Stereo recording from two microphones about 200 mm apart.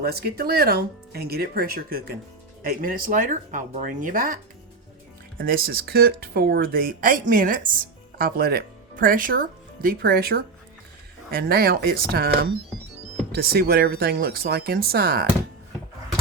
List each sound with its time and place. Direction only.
0.0 s speech: 50° right (ahead or behind)
5.4 s speech: 50° right (ahead or behind)